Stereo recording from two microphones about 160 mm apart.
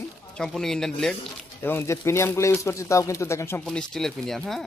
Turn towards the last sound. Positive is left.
turn(degrees=0)  # may be behind; listen again after turning